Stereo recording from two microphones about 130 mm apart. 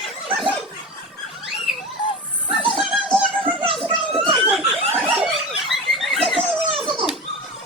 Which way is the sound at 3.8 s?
45° right (ahead or behind).